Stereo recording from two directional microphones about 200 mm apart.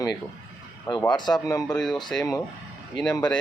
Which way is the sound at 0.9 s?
20° left (ahead or behind).